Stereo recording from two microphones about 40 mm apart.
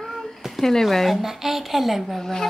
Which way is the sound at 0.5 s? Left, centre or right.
Centre.